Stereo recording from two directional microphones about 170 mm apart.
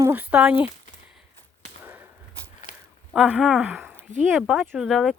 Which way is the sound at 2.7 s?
50° left (ahead or behind).